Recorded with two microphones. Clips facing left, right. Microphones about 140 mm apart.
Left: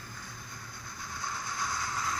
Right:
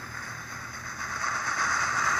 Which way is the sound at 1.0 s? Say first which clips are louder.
Right 5 dB; 70° right (ahead or behind).